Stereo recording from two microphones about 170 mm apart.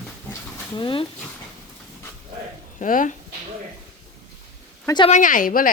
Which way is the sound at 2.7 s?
50° left (ahead or behind).